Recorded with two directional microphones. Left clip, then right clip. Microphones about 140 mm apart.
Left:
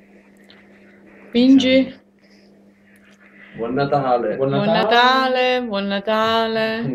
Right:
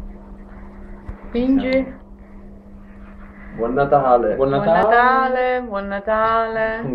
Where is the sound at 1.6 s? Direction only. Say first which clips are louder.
Left 3 dB; 45° left (ahead or behind).